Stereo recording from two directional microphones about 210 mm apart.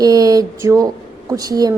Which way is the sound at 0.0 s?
15° right (ahead or behind).